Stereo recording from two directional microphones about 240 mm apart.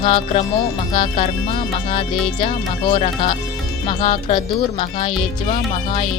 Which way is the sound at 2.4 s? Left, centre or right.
Left.